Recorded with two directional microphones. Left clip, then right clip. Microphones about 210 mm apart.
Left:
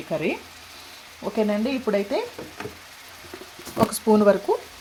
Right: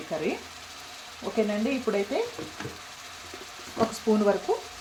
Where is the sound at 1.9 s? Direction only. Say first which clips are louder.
Left 4 dB; 35° left (ahead or behind).